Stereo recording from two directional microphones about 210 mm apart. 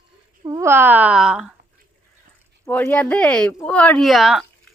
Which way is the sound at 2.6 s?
10° left (ahead or behind).